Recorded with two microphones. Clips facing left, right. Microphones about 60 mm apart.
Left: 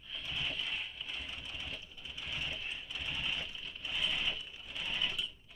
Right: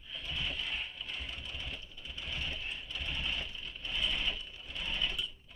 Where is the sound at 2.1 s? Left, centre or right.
Centre.